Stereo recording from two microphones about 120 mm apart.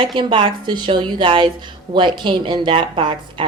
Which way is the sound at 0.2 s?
45° right (ahead or behind).